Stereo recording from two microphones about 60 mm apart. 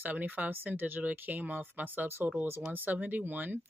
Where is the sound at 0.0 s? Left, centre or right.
Right.